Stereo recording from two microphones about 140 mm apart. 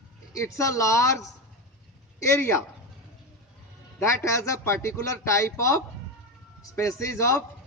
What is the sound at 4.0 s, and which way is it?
A man's voice, 20° left (ahead or behind).